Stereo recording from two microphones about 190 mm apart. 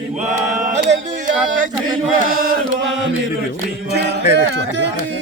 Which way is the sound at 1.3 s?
40° right (ahead or behind).